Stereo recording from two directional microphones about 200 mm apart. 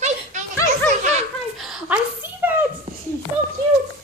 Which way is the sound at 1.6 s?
Centre (ahead or behind).